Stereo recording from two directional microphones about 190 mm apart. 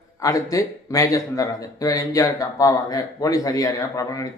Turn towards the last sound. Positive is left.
turn(degrees=20)  # may be behind; listen again after turning